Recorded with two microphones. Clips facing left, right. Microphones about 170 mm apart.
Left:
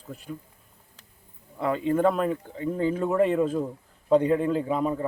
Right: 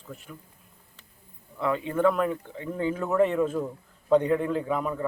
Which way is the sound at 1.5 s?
35° left (ahead or behind).